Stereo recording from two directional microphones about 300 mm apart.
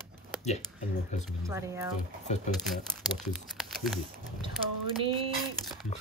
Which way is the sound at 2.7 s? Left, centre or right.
Centre.